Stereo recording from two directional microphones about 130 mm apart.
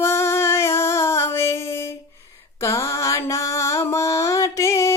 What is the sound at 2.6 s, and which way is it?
Mantra, 20° left (ahead or behind).